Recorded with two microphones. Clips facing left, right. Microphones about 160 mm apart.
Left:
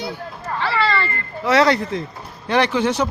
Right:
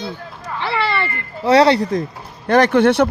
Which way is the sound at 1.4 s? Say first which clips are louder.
Right 4 dB; 30° right (ahead or behind).